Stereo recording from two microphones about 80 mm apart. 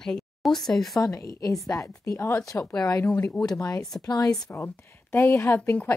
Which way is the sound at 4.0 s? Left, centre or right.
Left.